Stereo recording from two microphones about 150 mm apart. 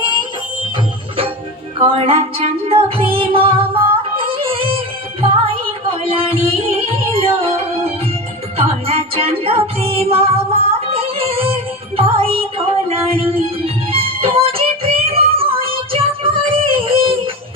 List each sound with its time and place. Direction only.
1.8 s music: 40° right (ahead or behind)